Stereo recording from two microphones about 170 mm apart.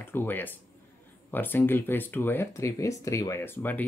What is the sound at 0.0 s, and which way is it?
Speech, 10° left (ahead or behind).